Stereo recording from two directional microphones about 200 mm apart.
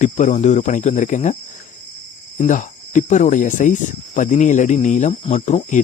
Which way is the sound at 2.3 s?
40° left (ahead or behind).